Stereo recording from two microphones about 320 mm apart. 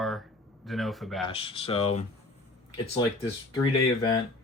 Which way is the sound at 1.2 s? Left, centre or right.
Centre.